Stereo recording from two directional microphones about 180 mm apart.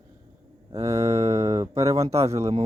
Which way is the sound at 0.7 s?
20° right (ahead or behind).